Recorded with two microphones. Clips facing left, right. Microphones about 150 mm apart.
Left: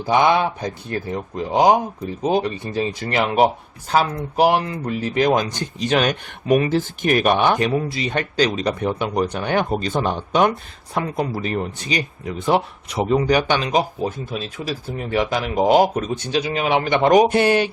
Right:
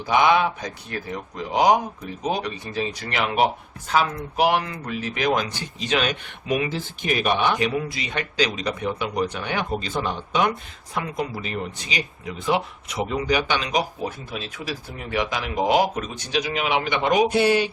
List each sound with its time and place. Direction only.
0.0 s speech: 35° left (ahead or behind); by 17.7 s 55° left (ahead or behind)